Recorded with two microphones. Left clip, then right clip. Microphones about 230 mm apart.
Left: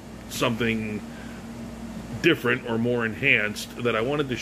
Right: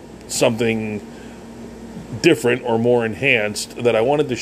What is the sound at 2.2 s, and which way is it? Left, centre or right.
Speech, right.